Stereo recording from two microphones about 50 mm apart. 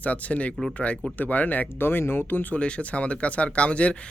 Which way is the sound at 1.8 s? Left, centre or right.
Left.